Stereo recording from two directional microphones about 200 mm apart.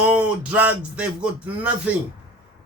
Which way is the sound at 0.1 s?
5° right (ahead or behind).